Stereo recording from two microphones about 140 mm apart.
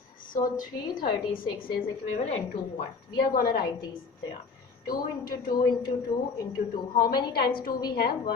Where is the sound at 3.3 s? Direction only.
90° left.